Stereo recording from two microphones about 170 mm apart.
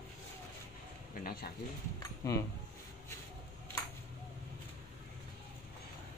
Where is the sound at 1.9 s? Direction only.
20° left (ahead or behind).